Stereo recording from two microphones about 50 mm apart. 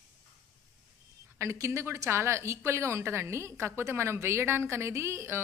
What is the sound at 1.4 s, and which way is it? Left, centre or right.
A woman's voice, right.